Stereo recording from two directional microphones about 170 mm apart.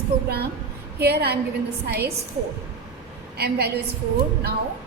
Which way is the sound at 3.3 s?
70° right (ahead or behind).